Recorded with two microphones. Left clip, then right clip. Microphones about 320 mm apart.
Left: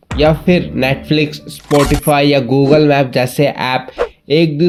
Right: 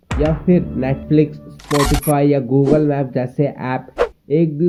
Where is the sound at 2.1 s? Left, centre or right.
Centre.